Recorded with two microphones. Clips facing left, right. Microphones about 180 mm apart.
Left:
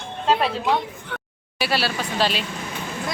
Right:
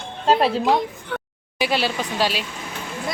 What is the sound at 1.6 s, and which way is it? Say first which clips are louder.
Speech: right 2 dB; 20° right (ahead or behind).